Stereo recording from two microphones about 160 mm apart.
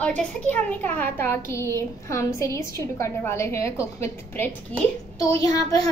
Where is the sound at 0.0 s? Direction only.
10° left (ahead or behind).